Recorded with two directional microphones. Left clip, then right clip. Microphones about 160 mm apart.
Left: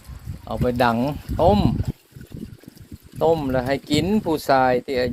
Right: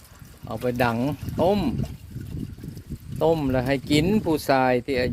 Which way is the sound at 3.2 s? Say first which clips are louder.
Left 2 dB; 30° right (ahead or behind).